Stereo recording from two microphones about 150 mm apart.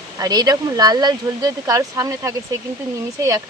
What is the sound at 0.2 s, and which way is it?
Speech, 25° right (ahead or behind).